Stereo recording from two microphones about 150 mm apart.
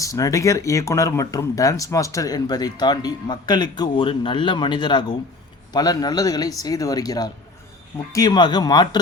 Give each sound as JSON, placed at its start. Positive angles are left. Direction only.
{"t": 0.0, "sound": "speech", "side_deg": 20}